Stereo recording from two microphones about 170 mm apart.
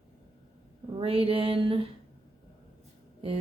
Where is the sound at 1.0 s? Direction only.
35° right (ahead or behind).